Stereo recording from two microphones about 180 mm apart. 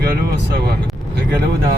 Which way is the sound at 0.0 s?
65° right (ahead or behind).